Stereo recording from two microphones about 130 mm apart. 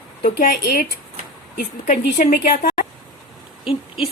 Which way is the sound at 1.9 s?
90° left.